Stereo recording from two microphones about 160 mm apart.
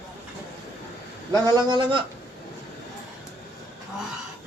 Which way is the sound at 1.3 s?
25° right (ahead or behind).